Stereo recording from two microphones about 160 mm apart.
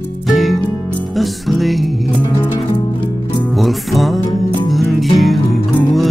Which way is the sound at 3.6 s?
Centre (ahead or behind).